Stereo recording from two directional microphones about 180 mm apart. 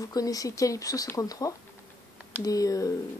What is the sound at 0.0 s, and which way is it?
Speech, 20° left (ahead or behind).